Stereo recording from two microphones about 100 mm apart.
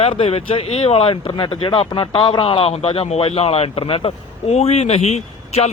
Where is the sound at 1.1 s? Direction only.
60° left (ahead or behind).